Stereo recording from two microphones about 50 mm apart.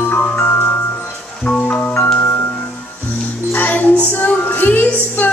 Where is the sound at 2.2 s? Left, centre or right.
Left.